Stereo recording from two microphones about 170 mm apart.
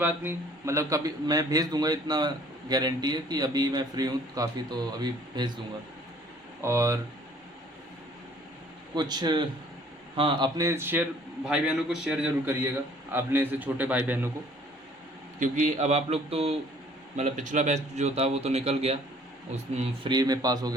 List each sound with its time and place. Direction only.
0.0 s speech: 10° right (ahead or behind)
6.6 s a man's voice: 15° right (ahead or behind)
9.0 s speech: 25° right (ahead or behind)
10.6 s a man's voice: 15° right (ahead or behind)
15.4 s speech: 50° right (ahead or behind)
20.1 s speech: 25° right (ahead or behind)